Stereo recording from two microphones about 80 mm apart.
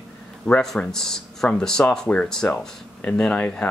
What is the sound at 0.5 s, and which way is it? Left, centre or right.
Speech, centre.